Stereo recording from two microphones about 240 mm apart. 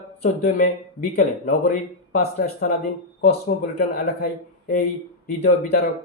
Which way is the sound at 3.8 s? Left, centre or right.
Left.